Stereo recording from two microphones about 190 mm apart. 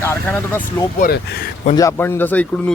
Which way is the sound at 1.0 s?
60° left (ahead or behind).